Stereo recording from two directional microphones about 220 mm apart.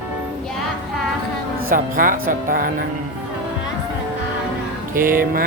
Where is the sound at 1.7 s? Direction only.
40° right (ahead or behind).